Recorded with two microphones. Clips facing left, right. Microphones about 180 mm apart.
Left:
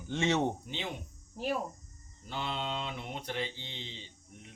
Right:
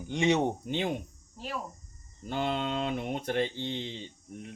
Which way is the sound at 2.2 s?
50° right (ahead or behind).